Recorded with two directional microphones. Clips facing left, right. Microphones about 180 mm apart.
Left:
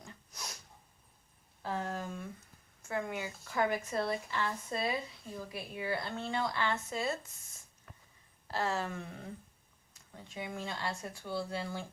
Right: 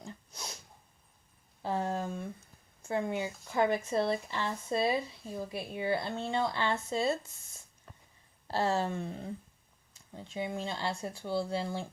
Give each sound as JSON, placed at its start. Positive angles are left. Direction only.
{"t": 0.0, "sound": "snort", "side_deg": -25}
{"t": 1.6, "sound": "a sound", "side_deg": -25}
{"t": 2.8, "sound": "speech", "side_deg": -25}
{"t": 8.4, "sound": "speech", "side_deg": -30}